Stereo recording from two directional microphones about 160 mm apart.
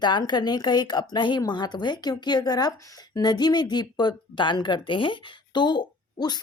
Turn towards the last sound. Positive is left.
turn(degrees=25)  # may be behind; listen again after turning